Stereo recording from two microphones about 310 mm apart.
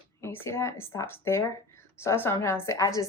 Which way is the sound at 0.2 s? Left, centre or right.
Centre.